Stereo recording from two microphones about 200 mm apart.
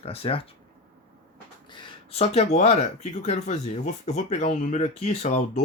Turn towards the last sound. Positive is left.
turn(degrees=35)  # may be behind; listen again after turning